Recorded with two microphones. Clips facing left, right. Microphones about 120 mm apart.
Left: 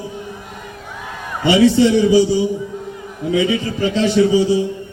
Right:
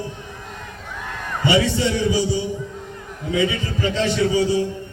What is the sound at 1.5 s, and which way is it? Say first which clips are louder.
Speech: left 7 dB; 30° left (ahead or behind).